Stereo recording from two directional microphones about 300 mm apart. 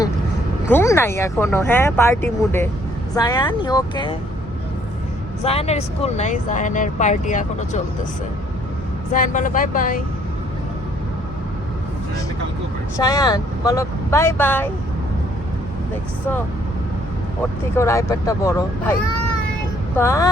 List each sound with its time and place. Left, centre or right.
0.7 s speech: centre
5.4 s speech: centre
9.1 s speech: left
13.0 s speech: centre
17.7 s speech: centre
20.0 s speech: centre